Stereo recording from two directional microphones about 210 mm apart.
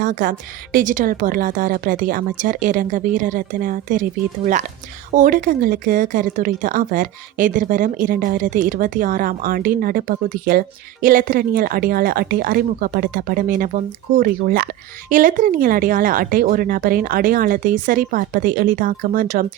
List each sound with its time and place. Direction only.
0.0 s a woman's voice: 40° right (ahead or behind)
5.1 s speech: 40° right (ahead or behind)